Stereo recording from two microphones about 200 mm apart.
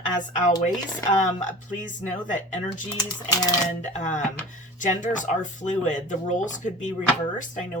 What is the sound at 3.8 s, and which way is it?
Speech, 35° left (ahead or behind).